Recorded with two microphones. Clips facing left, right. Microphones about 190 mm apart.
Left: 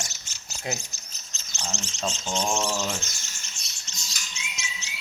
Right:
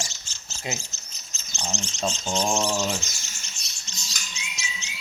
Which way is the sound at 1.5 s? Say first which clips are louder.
Right 3 dB; 30° right (ahead or behind).